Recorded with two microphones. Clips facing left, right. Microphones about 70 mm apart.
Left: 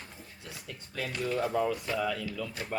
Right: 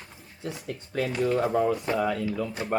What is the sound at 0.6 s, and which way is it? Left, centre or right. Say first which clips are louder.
Speech: right 8 dB; right.